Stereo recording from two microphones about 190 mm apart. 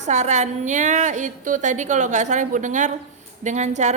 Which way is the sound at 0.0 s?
35° right (ahead or behind).